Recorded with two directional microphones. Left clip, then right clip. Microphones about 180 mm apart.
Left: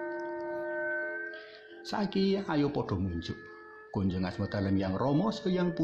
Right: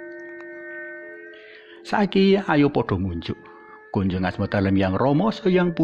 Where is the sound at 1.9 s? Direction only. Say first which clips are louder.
Right 12 dB; 30° right (ahead or behind).